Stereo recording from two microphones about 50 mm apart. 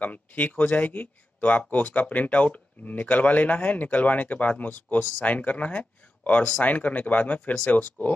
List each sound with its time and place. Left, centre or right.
0.0 s speech: left